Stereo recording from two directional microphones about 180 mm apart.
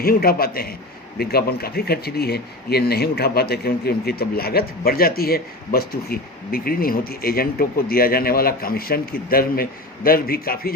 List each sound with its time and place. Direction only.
0.0 s speech: 55° left (ahead or behind)